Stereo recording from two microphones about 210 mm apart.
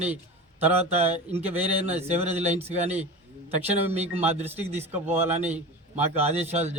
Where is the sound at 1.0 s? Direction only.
30° right (ahead or behind).